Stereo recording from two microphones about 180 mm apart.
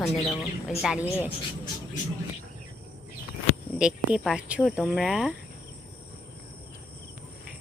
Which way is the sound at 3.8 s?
5° right (ahead or behind).